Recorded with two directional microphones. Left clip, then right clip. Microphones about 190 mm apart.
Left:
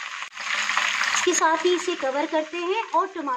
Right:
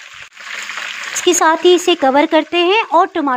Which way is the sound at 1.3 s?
40° right (ahead or behind).